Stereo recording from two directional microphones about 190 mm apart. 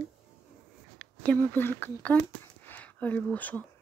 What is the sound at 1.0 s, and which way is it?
Speech, 5° left (ahead or behind).